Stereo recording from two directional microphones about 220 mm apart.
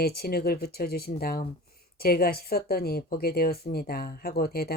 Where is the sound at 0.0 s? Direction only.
45° left (ahead or behind).